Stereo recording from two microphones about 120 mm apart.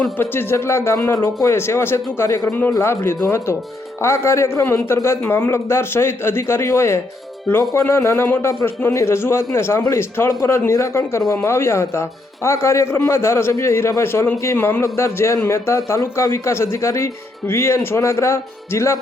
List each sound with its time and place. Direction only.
0.2 s a man's voice: 20° left (ahead or behind)